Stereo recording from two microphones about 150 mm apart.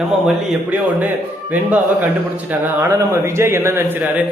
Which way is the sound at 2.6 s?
20° right (ahead or behind).